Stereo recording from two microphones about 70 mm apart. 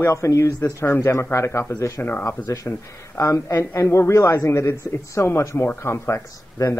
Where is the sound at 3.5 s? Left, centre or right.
Left.